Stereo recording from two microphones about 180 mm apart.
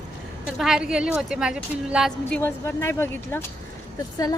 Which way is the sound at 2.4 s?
15° left (ahead or behind).